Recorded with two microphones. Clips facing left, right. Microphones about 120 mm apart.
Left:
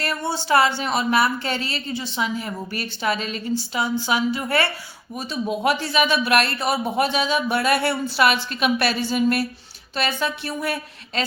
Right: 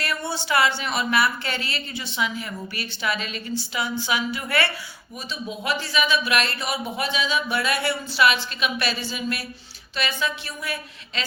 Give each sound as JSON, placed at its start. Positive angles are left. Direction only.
{"t": 0.0, "sound": "speech", "side_deg": 40}
{"t": 5.3, "sound": "speech", "side_deg": 55}